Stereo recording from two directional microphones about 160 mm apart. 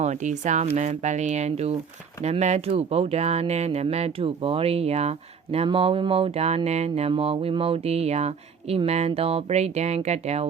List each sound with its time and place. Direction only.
0.0 s speech: 50° right (ahead or behind)